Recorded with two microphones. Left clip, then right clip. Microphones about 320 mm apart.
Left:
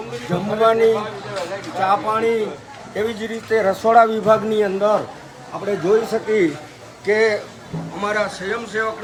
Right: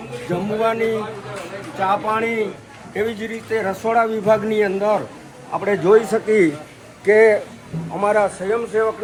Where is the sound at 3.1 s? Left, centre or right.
Centre.